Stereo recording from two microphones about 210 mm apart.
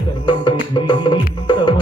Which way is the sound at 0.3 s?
25° left (ahead or behind).